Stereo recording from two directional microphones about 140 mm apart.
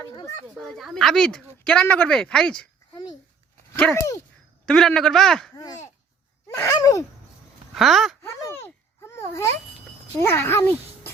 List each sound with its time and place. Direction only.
0.4 s speech: centre (ahead or behind)
4.6 s speech: 5° left (ahead or behind)
5.5 s speech: 25° left (ahead or behind)
6.5 s gasp: 20° left (ahead or behind)
6.7 s speech: 25° left (ahead or behind)
7.8 s speech: centre (ahead or behind)
8.3 s a sound: 20° left (ahead or behind)
10.2 s a child's voice: 15° left (ahead or behind)